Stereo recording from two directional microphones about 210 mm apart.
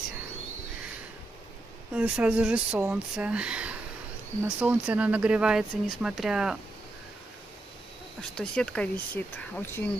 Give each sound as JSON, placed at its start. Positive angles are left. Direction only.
{"t": 2.0, "sound": "speech", "side_deg": -5}
{"t": 8.2, "sound": "speech", "side_deg": 5}